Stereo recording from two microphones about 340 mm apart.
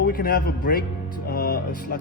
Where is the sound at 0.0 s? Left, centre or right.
Left.